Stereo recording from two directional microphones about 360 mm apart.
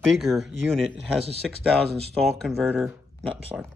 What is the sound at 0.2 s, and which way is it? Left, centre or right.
Speech, centre.